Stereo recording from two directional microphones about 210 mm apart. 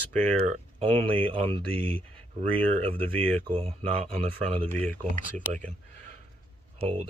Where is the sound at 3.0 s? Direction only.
10° left (ahead or behind).